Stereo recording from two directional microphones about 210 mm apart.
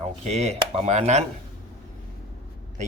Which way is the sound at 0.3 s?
30° right (ahead or behind).